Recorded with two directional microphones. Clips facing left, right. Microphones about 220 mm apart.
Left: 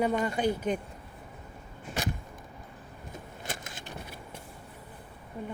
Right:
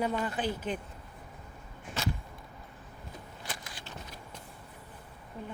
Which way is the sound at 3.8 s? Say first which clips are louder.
Left 3 dB; 15° left (ahead or behind).